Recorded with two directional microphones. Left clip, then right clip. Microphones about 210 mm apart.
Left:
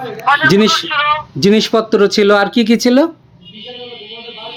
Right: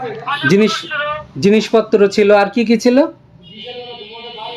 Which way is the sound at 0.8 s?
50° left (ahead or behind).